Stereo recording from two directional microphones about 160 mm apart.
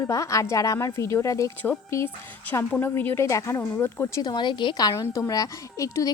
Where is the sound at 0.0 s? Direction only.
20° left (ahead or behind).